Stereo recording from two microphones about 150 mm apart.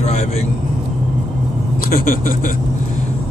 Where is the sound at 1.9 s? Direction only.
65° left (ahead or behind).